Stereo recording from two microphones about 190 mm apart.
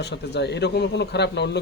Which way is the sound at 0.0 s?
60° left (ahead or behind).